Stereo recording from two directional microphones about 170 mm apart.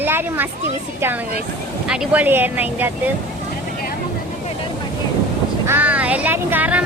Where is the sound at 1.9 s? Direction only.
5° right (ahead or behind).